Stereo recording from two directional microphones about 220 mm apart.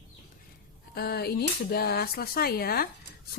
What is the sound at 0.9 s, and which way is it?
Speech, 45° left (ahead or behind).